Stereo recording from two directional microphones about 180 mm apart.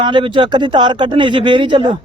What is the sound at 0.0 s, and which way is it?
Speech, 25° right (ahead or behind).